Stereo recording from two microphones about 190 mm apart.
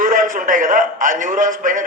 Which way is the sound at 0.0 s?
45° right (ahead or behind).